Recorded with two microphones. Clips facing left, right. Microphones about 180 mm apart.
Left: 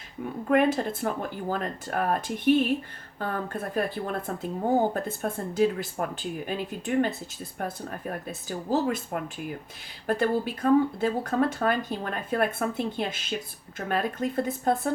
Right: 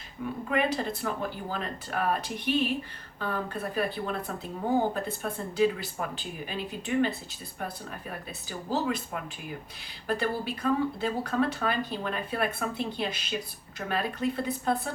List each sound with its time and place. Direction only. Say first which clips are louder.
0.4 s speech: left 6 dB; 50° left (ahead or behind)